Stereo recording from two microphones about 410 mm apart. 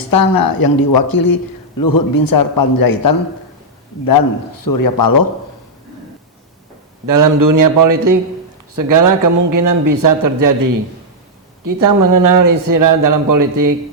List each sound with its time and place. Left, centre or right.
0.1 s a man's voice: left
7.1 s a man's voice: right